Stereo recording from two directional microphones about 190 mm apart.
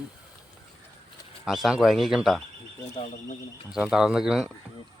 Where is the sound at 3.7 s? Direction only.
5° right (ahead or behind).